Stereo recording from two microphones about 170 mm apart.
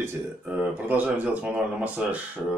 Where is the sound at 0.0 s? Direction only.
10° right (ahead or behind).